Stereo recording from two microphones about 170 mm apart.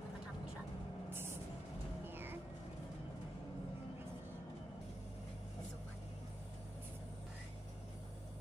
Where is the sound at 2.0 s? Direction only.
10° right (ahead or behind).